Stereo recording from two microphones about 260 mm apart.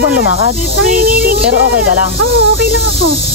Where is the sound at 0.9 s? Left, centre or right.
Right.